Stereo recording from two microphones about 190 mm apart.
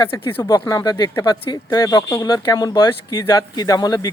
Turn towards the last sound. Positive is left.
turn(degrees=20)  # may be behind; listen again after turning